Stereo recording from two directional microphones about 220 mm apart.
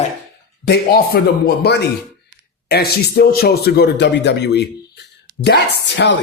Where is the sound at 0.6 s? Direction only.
45° left (ahead or behind).